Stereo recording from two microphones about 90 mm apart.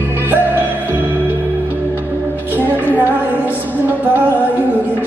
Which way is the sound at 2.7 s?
20° right (ahead or behind).